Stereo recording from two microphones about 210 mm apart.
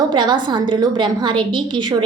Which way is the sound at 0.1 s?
20° right (ahead or behind).